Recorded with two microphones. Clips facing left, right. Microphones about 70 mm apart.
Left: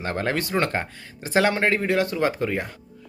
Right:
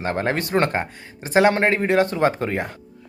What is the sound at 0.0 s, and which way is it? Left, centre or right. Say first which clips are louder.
Speech: right 3 dB; right.